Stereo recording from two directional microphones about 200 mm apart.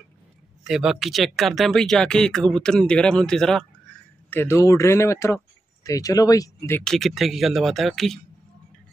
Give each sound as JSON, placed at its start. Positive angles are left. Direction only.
{"t": 0.7, "sound": "speech", "side_deg": 0}
{"t": 6.8, "sound": "speech", "side_deg": 0}